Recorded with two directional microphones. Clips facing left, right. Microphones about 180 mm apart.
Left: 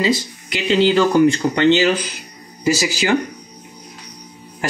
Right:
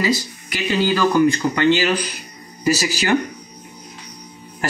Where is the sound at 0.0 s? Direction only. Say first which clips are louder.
Left 2 dB; 20° left (ahead or behind).